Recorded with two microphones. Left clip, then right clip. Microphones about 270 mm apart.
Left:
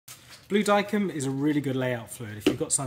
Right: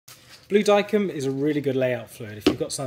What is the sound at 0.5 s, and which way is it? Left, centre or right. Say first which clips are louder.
Speech: right 4 dB; left.